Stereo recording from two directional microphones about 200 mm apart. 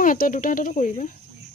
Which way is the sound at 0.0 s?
40° left (ahead or behind).